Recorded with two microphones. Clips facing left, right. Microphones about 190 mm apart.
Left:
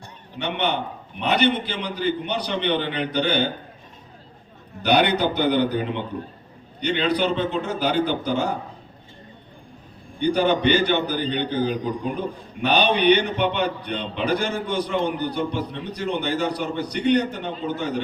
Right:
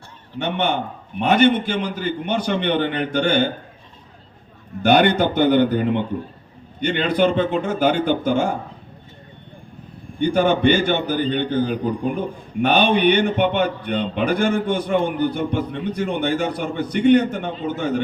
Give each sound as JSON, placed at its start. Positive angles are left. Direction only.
{"t": 0.3, "sound": "a man's voice", "side_deg": -50}
{"t": 4.8, "sound": "a man's voice", "side_deg": -50}
{"t": 10.2, "sound": "a man's voice", "side_deg": -50}